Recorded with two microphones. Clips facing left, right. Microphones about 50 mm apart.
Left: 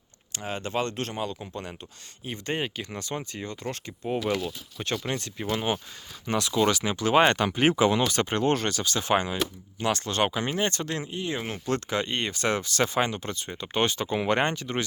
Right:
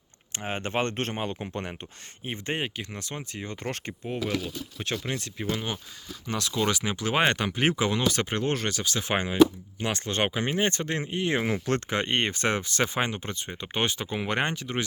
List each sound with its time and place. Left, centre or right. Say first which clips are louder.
0.3 s speech: right 1 dB; right
2.5 s speech: left 1 dB; centre
2.9 s speech: left 3 dB; centre
3.5 s speech: right 4 dB; right
4.0 s speech: left 3 dB; centre
5.5 s speech: left 3 dB; centre
6.5 s speech: left 3 dB; centre
9.1 s speech: right 7 dB; right
11.1 s speech: right 4 dB; right
11.3 s speech: right 6 dB; right
11.7 s speech: left 2 dB; right
12.5 s speech: left 2 dB; right; by 14.8 s centre